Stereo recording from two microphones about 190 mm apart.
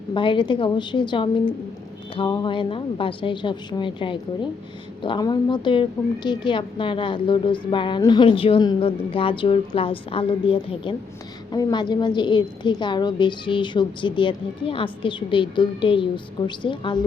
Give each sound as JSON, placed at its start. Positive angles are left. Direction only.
{"t": 0.1, "sound": "a woman's voice", "side_deg": 25}